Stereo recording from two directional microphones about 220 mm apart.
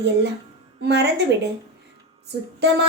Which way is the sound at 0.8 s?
50° right (ahead or behind).